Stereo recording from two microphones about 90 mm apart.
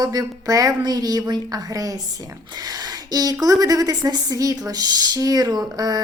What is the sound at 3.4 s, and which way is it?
A woman's voice, 40° right (ahead or behind).